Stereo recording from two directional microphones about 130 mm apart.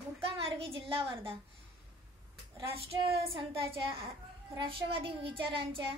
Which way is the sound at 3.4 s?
45° right (ahead or behind).